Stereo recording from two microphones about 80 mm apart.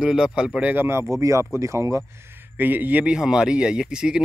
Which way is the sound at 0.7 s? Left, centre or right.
Right.